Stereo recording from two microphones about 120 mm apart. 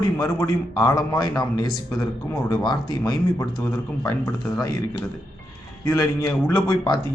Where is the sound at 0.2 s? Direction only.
30° left (ahead or behind).